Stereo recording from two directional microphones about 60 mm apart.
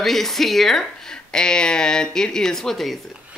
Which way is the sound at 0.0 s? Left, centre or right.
Centre.